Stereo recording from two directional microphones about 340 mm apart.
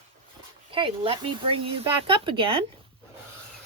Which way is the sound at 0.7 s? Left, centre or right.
Centre.